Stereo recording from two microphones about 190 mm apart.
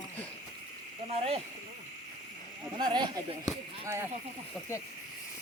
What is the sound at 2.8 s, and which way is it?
Speech, 25° right (ahead or behind).